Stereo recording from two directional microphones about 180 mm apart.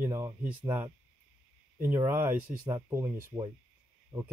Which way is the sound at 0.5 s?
10° right (ahead or behind).